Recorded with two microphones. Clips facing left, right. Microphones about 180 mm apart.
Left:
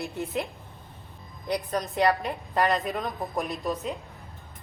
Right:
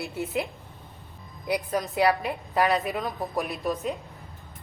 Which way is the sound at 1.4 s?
10° right (ahead or behind).